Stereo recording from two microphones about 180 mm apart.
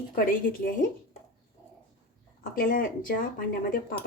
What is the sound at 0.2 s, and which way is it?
Speech, 50° left (ahead or behind).